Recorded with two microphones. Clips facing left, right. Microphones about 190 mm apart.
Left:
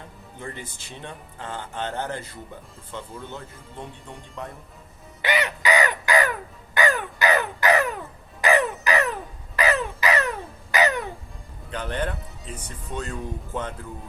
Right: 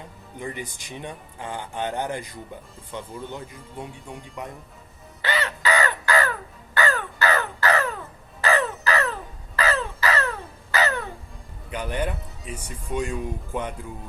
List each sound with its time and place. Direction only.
0.3 s speech: 15° right (ahead or behind)
5.2 s crow: 15° left (ahead or behind)
8.4 s music: 15° left (ahead or behind)
9.6 s a sound: 15° left (ahead or behind)
11.7 s speech: 10° right (ahead or behind)